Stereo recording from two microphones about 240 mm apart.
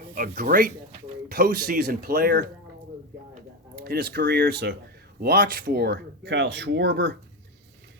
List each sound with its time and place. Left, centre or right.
0.1 s speech: right
3.8 s speech: right